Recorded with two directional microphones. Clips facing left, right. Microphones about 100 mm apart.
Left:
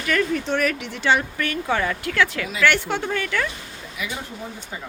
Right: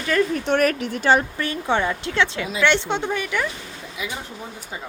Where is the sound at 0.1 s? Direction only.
20° right (ahead or behind).